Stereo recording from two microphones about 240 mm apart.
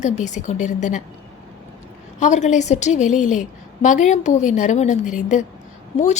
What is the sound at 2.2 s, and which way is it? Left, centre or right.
A woman's voice, left.